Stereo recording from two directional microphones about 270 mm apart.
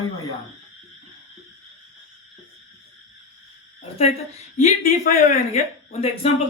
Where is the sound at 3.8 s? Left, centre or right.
Left.